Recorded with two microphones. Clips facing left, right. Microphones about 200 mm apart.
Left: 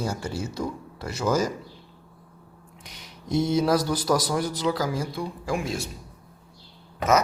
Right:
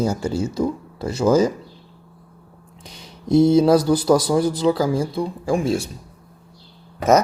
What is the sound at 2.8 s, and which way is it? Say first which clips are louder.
A man's voice: right 6 dB; 30° right (ahead or behind).